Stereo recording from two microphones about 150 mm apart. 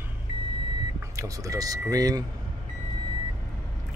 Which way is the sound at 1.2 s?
20° right (ahead or behind).